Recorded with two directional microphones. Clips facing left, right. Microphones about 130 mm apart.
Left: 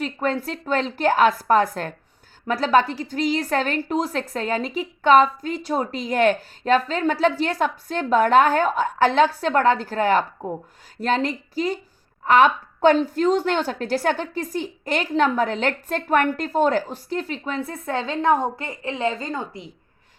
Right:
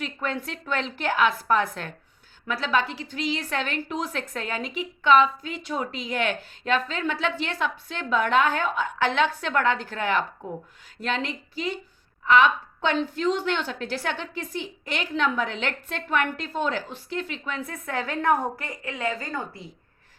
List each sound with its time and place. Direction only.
0.0 s a woman's voice: 35° left (ahead or behind); by 19.7 s 20° left (ahead or behind)